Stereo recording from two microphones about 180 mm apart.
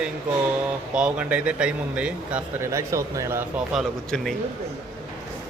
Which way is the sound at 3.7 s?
Centre (ahead or behind).